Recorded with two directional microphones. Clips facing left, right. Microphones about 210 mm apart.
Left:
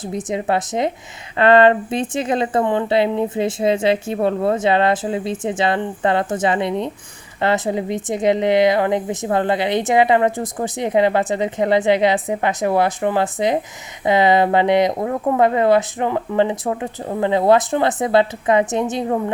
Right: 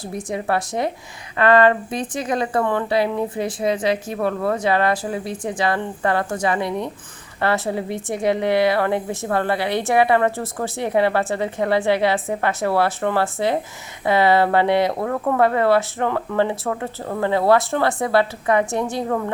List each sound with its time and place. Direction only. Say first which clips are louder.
0.1 s a woman's voice: left 2 dB; 20° left (ahead or behind)